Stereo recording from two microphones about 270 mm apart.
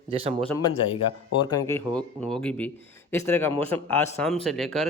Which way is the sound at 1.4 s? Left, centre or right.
Centre.